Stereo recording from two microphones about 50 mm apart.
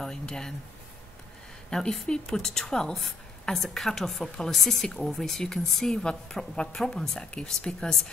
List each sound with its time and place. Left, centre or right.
0.0 s a woman's voice: centre
1.7 s a woman's voice: centre